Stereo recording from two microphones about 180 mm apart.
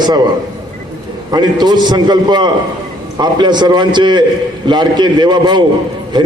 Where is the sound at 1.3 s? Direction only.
25° right (ahead or behind).